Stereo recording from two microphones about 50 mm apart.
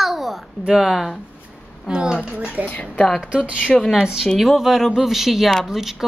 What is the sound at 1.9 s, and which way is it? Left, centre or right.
Speech, centre.